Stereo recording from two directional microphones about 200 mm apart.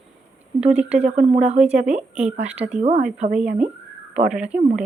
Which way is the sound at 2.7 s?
30° right (ahead or behind).